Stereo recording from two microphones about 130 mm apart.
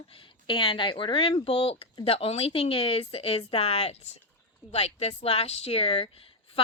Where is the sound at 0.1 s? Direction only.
40° left (ahead or behind).